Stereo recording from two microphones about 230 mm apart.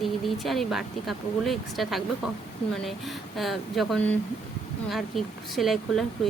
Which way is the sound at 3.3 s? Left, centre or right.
Centre.